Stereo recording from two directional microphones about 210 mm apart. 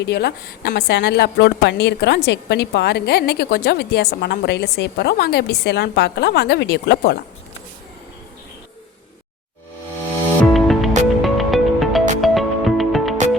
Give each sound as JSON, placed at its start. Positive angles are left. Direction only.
{"t": 0.0, "sound": "a woman's voice", "side_deg": 50}
{"t": 10.4, "sound": "music", "side_deg": 0}